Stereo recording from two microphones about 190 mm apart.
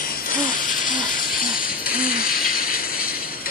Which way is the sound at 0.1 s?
50° left (ahead or behind).